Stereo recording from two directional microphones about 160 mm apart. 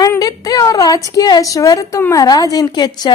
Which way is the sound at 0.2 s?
20° left (ahead or behind).